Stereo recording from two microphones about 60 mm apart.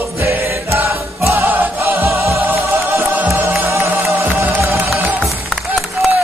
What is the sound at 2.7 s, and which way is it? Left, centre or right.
Music, right.